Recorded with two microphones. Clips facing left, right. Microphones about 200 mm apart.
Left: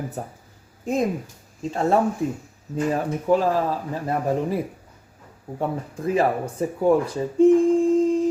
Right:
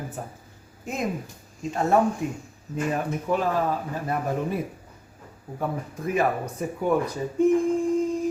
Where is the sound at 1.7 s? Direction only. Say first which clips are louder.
Left 1 dB; 30° left (ahead or behind).